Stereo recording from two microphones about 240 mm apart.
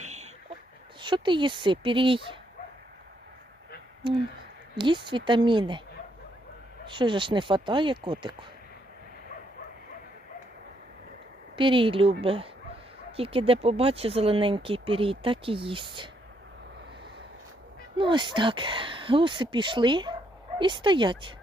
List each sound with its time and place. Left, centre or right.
0.0 s a sound: right
1.0 s speech: centre
4.8 s speech: centre
6.8 s speech: centre
11.5 s speech: right
17.9 s speech: centre